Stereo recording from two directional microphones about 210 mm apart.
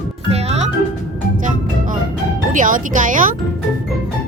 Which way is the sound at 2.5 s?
40° right (ahead or behind).